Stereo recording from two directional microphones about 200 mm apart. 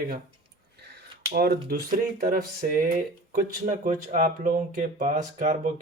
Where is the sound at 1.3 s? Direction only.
50° right (ahead or behind).